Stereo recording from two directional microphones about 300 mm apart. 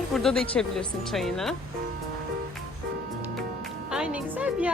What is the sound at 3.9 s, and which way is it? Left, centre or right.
Music, centre.